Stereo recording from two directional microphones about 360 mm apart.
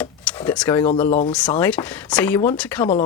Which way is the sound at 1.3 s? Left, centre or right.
Centre.